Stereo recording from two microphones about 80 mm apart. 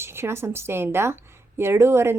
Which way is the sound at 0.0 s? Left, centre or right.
Right.